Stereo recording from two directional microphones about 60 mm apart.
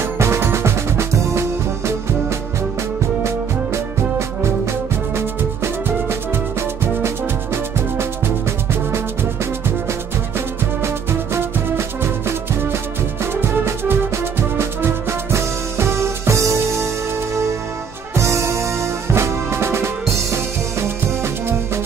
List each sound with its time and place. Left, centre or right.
0.0 s music: right
10.8 s music: right
18.1 s music: right